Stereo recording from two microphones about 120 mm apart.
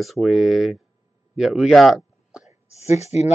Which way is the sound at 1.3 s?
5° right (ahead or behind).